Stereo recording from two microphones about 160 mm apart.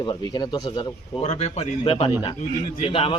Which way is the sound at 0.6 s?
45° left (ahead or behind).